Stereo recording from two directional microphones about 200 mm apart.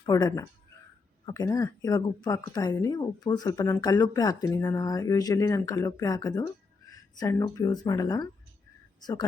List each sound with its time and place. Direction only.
0.0 s a woman's voice: 20° left (ahead or behind)